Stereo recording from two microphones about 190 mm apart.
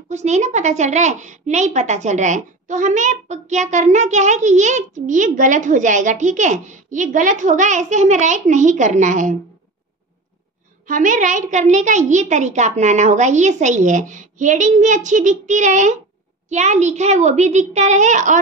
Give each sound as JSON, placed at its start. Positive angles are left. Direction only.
{"t": 0.1, "sound": "a woman's voice", "side_deg": -40}
{"t": 10.9, "sound": "a woman's voice", "side_deg": -45}